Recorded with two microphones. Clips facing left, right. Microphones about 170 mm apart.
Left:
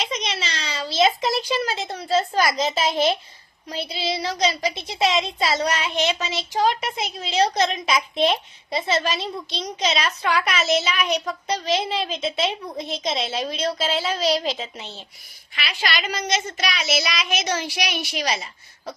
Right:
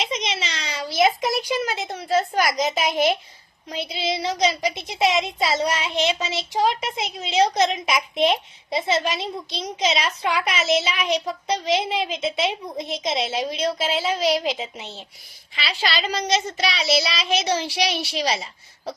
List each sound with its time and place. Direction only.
0.0 s a child's voice: 20° right (ahead or behind)
15.5 s a woman's voice: 35° right (ahead or behind)